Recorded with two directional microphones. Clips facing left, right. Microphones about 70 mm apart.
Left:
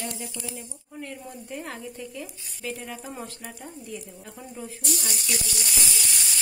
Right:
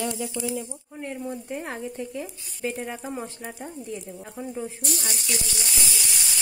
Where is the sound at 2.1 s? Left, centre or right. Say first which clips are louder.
Right 4 dB; right.